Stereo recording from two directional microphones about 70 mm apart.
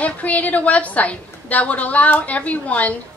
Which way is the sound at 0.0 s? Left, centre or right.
Left.